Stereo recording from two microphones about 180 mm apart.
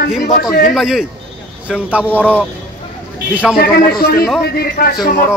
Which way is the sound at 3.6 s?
60° left (ahead or behind).